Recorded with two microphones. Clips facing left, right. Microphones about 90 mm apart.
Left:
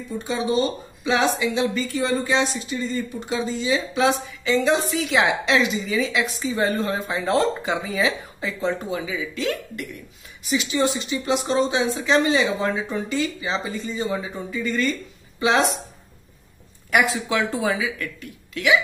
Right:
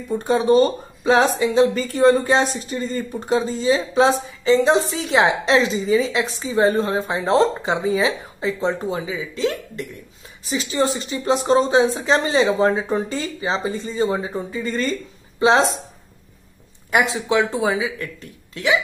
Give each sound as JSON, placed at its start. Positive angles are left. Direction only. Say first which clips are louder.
{"t": 0.2, "sound": "speech", "louder": "right 7 dB", "side_deg": -45}
{"t": 16.9, "sound": "speech", "louder": "right 2 dB", "side_deg": -25}